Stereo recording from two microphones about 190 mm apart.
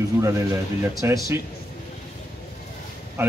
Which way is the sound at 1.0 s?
15° right (ahead or behind).